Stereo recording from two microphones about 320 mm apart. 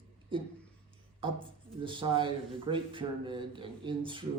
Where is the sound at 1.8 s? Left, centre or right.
Centre.